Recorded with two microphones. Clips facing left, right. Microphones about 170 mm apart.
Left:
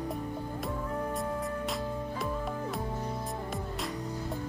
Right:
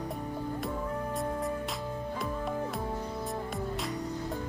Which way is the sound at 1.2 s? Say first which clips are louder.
Right 1 dB; centre (ahead or behind).